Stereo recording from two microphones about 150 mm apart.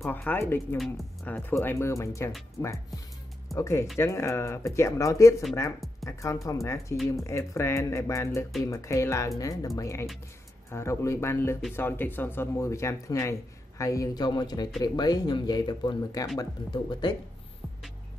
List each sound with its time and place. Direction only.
0.0 s speech: 10° left (ahead or behind); by 17.1 s 30° left (ahead or behind)